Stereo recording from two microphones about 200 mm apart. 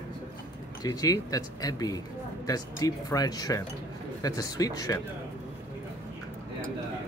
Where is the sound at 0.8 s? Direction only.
20° left (ahead or behind).